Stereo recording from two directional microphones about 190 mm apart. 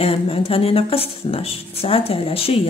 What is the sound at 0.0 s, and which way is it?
Speech, 30° left (ahead or behind).